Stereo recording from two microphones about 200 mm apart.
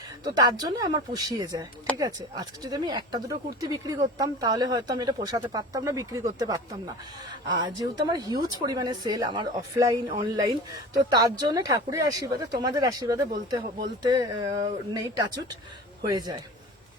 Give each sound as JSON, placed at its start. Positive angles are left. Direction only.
{"t": 0.3, "sound": "speech", "side_deg": -20}
{"t": 7.6, "sound": "a man's voice", "side_deg": -20}